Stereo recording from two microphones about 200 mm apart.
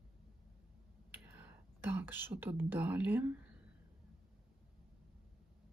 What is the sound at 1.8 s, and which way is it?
Speech, 10° right (ahead or behind).